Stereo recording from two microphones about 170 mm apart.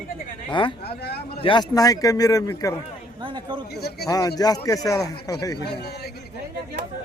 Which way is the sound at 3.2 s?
25° right (ahead or behind).